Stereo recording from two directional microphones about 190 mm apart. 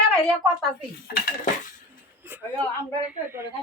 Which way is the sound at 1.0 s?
55° left (ahead or behind).